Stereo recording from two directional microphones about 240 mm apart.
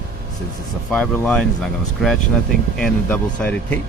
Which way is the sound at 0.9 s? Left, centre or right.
Centre.